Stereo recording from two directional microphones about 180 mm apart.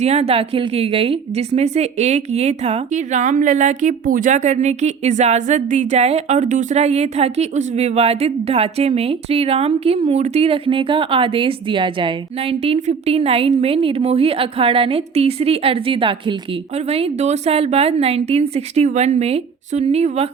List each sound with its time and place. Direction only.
0.0 s a woman's voice: 35° right (ahead or behind)